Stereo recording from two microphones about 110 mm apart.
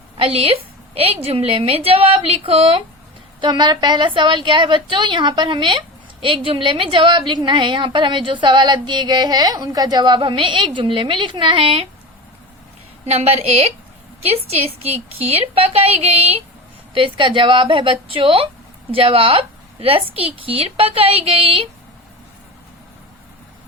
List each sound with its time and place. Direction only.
0.2 s a woman's voice: 60° right (ahead or behind)
3.4 s a woman's voice: 45° right (ahead or behind)
13.1 s a woman's voice: 70° right (ahead or behind)
16.9 s a woman's voice: 50° right (ahead or behind)